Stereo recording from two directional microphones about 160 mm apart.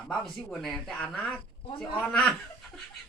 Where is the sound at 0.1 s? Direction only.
5° left (ahead or behind).